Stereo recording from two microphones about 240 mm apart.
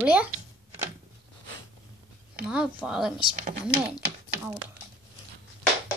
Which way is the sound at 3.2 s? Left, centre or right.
Right.